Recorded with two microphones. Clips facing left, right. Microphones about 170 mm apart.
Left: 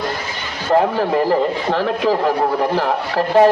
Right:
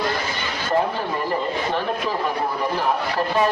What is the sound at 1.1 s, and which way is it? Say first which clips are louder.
A man's voice: left 8 dB; 90° left.